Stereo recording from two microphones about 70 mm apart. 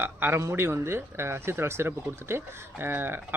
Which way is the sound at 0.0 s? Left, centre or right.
Right.